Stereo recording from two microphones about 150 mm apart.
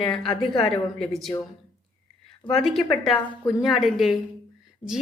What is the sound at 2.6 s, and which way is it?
A woman's voice, centre (ahead or behind).